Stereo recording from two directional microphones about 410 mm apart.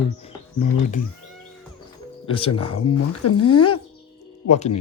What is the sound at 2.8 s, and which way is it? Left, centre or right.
Speech, left.